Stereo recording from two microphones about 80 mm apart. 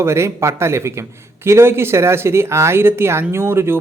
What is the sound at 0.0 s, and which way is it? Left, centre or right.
Speech, right.